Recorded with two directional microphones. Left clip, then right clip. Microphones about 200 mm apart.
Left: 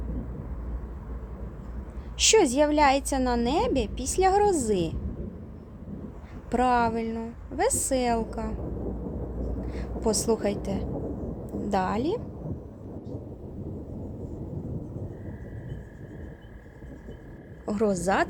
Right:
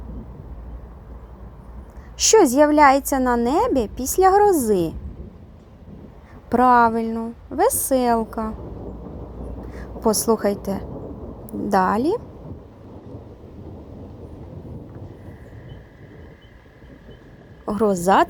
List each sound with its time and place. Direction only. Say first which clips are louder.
2.1 s a woman's voice: right 6 dB; 25° right (ahead or behind)
6.5 s a woman's voice: right 9 dB; 30° right (ahead or behind)
9.7 s a woman's voice: right 7 dB; 30° right (ahead or behind)
17.7 s a woman's voice: right 8 dB; 30° right (ahead or behind)